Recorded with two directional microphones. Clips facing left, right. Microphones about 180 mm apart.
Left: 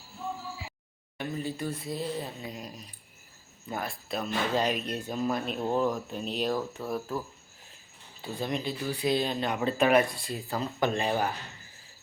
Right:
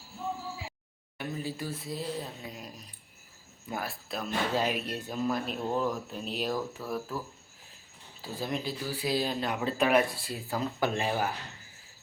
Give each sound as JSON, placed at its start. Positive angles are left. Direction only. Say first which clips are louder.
{"t": 1.2, "sound": "speech", "louder": "left 2 dB", "side_deg": -5}
{"t": 6.8, "sound": "speech", "louder": "left 2 dB", "side_deg": 20}
{"t": 8.2, "sound": "speech", "louder": "left 2 dB", "side_deg": 0}